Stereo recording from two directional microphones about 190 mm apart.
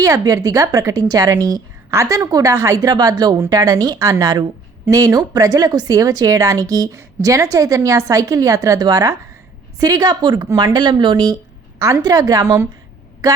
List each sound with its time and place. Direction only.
0.0 s a woman's voice: 20° right (ahead or behind)